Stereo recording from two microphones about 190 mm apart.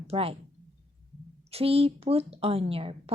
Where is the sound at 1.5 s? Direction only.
30° right (ahead or behind).